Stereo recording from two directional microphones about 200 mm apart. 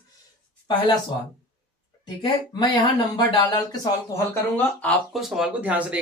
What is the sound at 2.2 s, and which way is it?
Speech, 20° left (ahead or behind).